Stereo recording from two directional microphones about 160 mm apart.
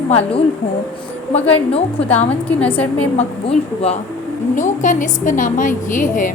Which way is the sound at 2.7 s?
10° left (ahead or behind).